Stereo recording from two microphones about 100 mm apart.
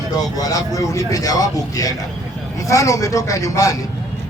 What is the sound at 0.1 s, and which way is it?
A man's voice, 40° left (ahead or behind).